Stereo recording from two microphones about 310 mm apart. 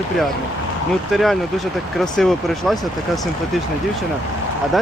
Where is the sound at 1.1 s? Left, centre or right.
Centre.